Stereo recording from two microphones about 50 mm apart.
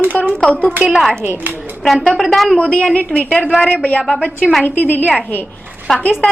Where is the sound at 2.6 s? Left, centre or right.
Left.